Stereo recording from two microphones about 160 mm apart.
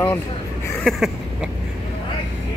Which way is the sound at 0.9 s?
Centre (ahead or behind).